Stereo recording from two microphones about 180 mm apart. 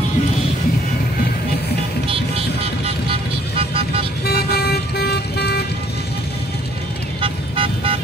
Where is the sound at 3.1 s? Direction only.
30° right (ahead or behind).